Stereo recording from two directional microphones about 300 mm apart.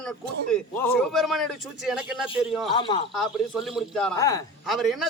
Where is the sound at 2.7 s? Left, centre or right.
Centre.